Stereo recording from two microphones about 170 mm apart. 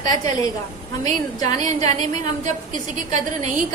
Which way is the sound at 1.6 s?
45° right (ahead or behind).